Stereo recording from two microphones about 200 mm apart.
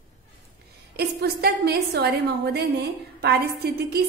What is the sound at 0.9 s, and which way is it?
A woman's voice, 55° right (ahead or behind).